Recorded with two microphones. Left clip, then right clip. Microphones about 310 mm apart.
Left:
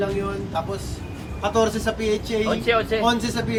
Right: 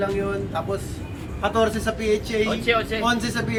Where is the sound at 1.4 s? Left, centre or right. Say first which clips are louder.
Even; centre.